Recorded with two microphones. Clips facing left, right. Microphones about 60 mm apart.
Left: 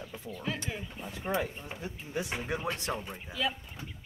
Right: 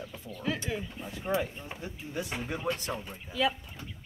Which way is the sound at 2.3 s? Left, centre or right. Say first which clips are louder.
Right 3 dB; centre.